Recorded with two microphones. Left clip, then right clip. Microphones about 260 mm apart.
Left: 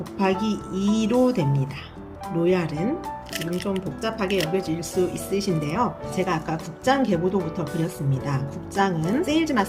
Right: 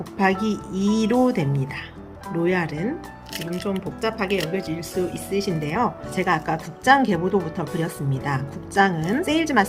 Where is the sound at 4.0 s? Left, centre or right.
Centre.